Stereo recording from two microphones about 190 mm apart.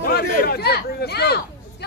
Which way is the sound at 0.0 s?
55° left (ahead or behind).